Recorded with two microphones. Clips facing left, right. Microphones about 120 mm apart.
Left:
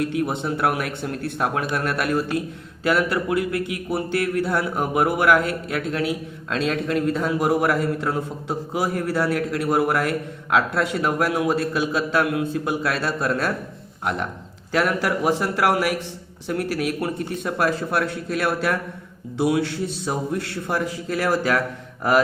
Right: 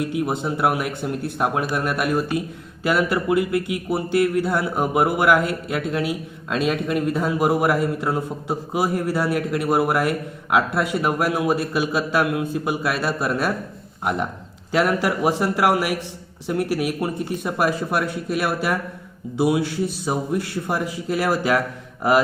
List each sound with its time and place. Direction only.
0.0 s speech: 15° right (ahead or behind)